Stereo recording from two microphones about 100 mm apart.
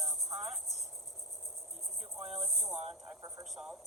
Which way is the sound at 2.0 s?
5° right (ahead or behind).